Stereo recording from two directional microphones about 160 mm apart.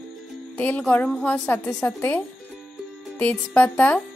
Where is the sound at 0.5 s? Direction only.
10° left (ahead or behind).